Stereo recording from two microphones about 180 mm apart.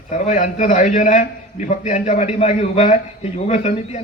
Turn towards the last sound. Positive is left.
turn(degrees=40)  # may be behind; listen again after turning